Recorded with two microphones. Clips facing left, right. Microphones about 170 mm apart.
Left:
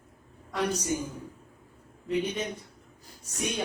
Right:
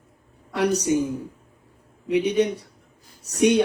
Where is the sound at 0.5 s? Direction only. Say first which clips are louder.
Right 8 dB; 75° right (ahead or behind).